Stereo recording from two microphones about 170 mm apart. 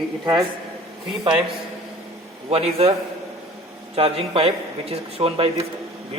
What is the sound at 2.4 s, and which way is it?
Speech, 35° right (ahead or behind).